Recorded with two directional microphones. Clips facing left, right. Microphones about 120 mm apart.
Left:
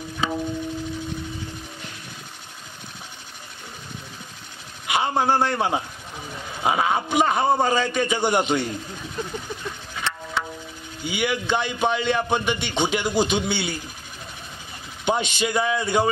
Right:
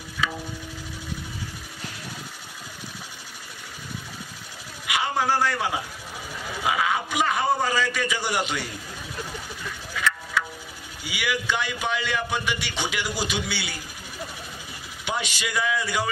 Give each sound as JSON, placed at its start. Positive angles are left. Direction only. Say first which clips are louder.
{"t": 0.2, "sound": "a sound", "louder": "left 4 dB", "side_deg": 30}
{"t": 4.8, "sound": "a man's voice", "louder": "left 3 dB", "side_deg": 30}
{"t": 9.9, "sound": "music", "louder": "right 2 dB", "side_deg": 30}
{"t": 11.1, "sound": "a man's voice", "louder": "left 4 dB", "side_deg": 25}
{"t": 15.0, "sound": "a man's voice", "louder": "left 7 dB", "side_deg": 25}